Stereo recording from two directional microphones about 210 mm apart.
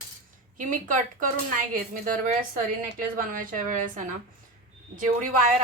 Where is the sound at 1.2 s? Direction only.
40° right (ahead or behind).